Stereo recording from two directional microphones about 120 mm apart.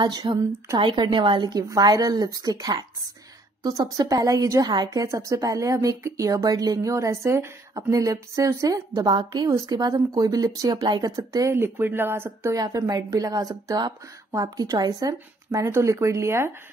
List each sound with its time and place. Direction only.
0.0 s a woman's voice: 35° right (ahead or behind); by 16.5 s 20° right (ahead or behind)